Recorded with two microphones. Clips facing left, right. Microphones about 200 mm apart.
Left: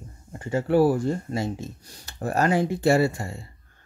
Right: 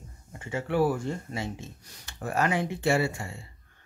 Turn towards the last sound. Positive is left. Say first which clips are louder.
# left 6 dB
turn(degrees=40)  # may be behind; listen again after turning